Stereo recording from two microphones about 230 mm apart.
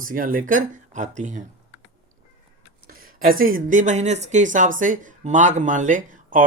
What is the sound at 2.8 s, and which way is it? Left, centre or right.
Speech, right.